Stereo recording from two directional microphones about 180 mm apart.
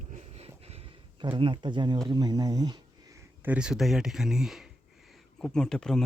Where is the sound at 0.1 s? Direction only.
35° right (ahead or behind).